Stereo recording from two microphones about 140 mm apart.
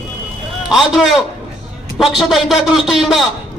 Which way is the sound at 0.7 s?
Centre (ahead or behind).